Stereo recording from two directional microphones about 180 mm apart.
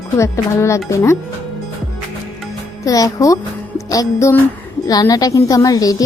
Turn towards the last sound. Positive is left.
turn(degrees=20)  # may be behind; listen again after turning